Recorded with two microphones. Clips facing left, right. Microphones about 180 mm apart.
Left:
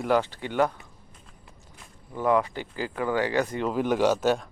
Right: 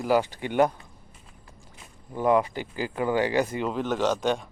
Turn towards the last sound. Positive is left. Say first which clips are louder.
# left 2 dB
turn(degrees=5)  # may be behind; listen again after turning